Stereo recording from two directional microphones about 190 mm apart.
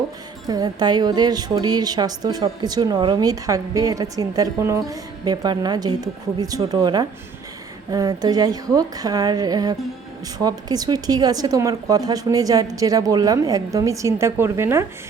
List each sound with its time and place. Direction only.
0.4 s a woman's voice: 20° right (ahead or behind)